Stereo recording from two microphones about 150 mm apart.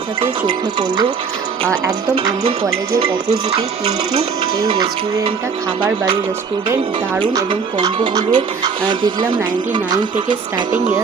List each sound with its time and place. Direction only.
0.2 s speech: 35° right (ahead or behind)
3.0 s speech: 40° right (ahead or behind)
7.2 s speech: 30° right (ahead or behind)